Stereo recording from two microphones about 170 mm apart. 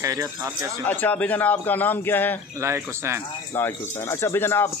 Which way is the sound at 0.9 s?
10° left (ahead or behind).